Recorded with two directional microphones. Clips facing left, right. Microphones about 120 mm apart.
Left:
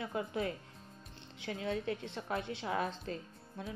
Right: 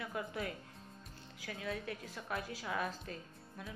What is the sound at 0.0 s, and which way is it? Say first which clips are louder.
A woman's voice: left 4 dB; 25° left (ahead or behind).